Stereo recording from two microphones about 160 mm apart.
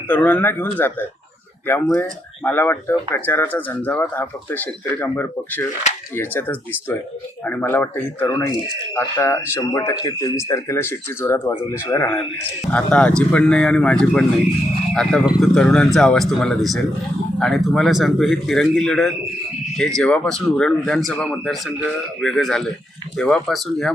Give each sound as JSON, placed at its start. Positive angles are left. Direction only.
{"t": 0.1, "sound": "speech", "side_deg": 10}